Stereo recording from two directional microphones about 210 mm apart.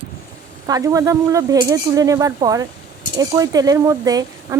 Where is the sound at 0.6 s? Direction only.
15° right (ahead or behind).